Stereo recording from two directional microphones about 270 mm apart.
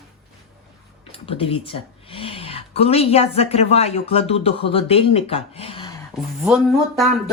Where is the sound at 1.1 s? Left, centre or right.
Left.